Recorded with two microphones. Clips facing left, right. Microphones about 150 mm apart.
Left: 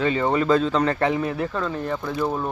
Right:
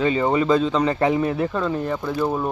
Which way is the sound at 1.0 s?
20° right (ahead or behind).